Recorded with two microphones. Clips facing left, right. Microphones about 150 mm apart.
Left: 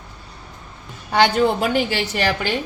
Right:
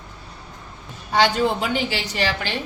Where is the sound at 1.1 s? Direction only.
55° left (ahead or behind).